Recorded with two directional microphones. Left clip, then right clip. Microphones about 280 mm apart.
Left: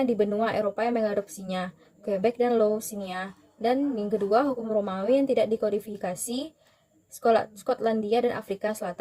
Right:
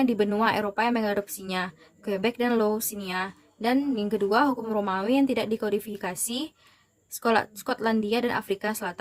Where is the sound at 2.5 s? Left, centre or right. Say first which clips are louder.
Left 2 dB; right.